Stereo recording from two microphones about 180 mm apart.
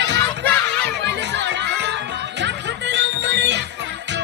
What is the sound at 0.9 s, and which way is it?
Chatter, 75° right (ahead or behind).